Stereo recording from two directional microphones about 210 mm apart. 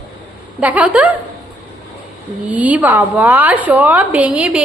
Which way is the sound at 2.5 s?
5° right (ahead or behind).